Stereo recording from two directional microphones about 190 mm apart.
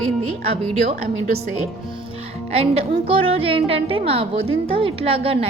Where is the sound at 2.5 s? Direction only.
30° right (ahead or behind).